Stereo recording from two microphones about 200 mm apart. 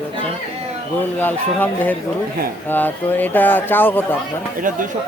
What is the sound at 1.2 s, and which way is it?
Speech, 10° left (ahead or behind).